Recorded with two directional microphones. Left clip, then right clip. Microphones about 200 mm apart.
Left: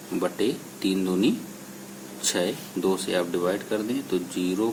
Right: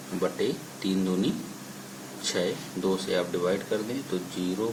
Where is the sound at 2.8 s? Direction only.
40° left (ahead or behind).